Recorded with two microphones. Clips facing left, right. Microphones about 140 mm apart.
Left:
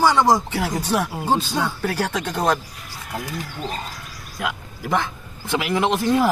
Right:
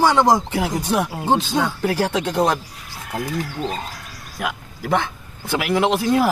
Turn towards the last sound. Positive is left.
turn(degrees=-10)  # may be behind; listen again after turning